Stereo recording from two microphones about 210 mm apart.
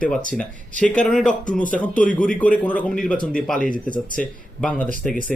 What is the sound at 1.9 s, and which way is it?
Speech, 40° left (ahead or behind).